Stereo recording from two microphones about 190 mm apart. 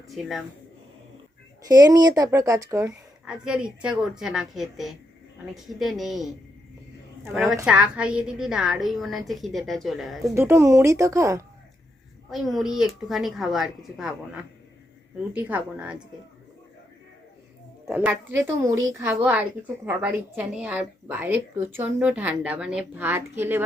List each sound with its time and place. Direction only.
0.1 s a woman's voice: centre (ahead or behind)
1.6 s a woman's voice: 20° right (ahead or behind); by 6.3 s centre (ahead or behind)
7.5 s a woman's voice: 10° right (ahead or behind)
10.3 s speech: 15° right (ahead or behind)
12.3 s a woman's voice: centre (ahead or behind)
17.8 s speech: 10° right (ahead or behind)